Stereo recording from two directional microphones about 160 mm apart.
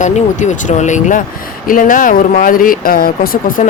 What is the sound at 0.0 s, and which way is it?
Speech, 50° left (ahead or behind).